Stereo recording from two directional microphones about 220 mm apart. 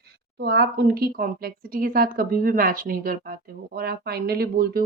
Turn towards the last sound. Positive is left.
turn(degrees=-45)  # may be behind; listen again after turning